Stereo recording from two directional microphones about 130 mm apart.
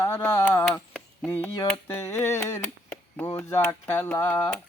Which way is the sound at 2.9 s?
10° left (ahead or behind).